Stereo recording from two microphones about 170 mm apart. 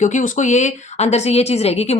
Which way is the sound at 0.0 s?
45° left (ahead or behind).